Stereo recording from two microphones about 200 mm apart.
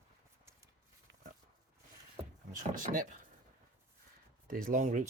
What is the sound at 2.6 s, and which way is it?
Speech, 40° right (ahead or behind).